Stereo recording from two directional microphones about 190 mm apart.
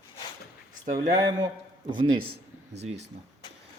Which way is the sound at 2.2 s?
55° right (ahead or behind).